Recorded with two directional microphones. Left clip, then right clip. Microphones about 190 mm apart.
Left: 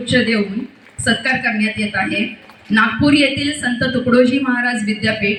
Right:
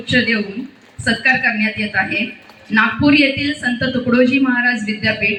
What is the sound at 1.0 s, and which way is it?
A man's voice, 50° left (ahead or behind).